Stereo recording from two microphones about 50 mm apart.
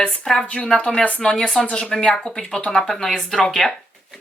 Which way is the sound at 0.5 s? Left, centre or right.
Left.